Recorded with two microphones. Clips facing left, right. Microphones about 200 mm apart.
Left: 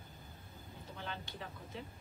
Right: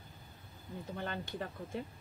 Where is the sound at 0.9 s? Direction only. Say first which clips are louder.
Right 6 dB; 50° right (ahead or behind).